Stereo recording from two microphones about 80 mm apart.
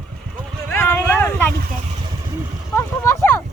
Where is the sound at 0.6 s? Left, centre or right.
Left.